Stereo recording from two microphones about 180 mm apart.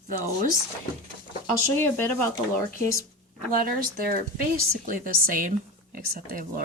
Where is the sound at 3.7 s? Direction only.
55° right (ahead or behind).